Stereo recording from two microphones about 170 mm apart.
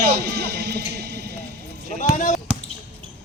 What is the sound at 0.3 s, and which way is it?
Music, 70° right (ahead or behind).